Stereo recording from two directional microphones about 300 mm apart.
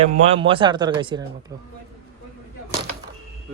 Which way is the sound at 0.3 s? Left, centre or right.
Centre.